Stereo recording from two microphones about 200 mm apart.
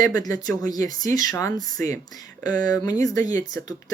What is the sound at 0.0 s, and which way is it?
Speech, 20° left (ahead or behind).